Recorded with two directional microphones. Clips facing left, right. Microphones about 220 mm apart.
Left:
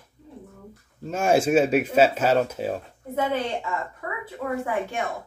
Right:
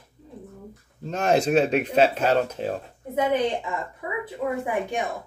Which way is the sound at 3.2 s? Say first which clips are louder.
Right 3 dB; 15° right (ahead or behind).